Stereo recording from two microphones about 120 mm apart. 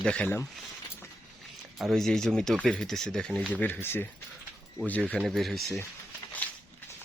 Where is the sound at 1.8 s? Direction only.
Centre (ahead or behind).